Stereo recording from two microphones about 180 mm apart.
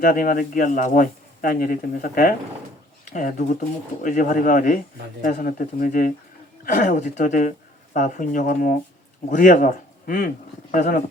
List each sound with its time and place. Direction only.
0.0 s speech: 50° left (ahead or behind)